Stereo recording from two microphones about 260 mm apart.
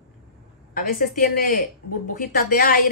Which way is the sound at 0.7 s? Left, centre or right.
Left.